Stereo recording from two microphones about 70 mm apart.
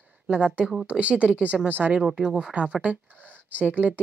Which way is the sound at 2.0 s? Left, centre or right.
Centre.